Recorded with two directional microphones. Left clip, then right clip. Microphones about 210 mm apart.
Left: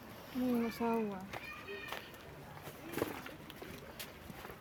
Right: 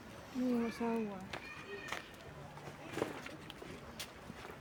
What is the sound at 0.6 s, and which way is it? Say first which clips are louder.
Speech: left 2 dB; 45° left (ahead or behind).